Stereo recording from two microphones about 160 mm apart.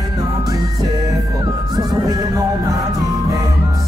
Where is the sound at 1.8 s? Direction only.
25° right (ahead or behind).